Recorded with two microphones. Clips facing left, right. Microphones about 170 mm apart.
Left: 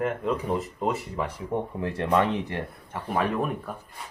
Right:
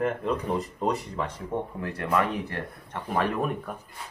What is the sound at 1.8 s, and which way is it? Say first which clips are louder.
Speech: left 3 dB; 25° left (ahead or behind).